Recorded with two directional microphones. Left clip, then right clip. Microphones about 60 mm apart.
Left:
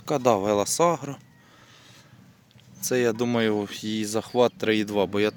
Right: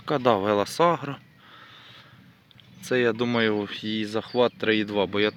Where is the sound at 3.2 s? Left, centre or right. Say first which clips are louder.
Even; left.